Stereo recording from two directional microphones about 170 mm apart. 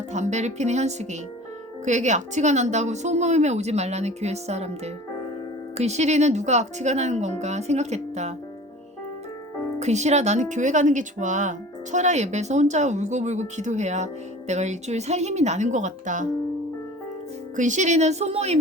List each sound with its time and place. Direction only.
0.1 s speech: 45° right (ahead or behind)
5.7 s speech: 40° right (ahead or behind)
9.7 s speech: 40° right (ahead or behind)
17.6 s speech: 45° right (ahead or behind)